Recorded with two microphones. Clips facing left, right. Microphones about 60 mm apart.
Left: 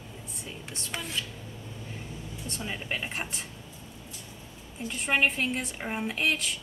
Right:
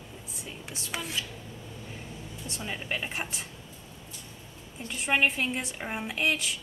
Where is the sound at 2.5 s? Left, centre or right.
Centre.